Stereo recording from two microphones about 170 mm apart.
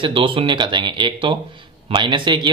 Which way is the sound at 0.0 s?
30° right (ahead or behind).